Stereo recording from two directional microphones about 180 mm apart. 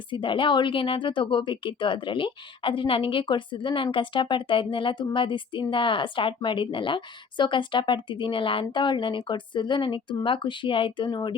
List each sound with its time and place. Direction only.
0.1 s speech: 25° left (ahead or behind)